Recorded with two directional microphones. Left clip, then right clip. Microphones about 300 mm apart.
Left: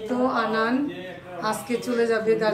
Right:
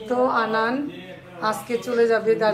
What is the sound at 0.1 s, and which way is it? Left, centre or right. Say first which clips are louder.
A woman's voice: right 3 dB; centre.